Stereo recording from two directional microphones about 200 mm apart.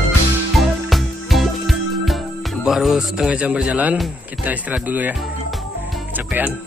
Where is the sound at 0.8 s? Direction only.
Centre (ahead or behind).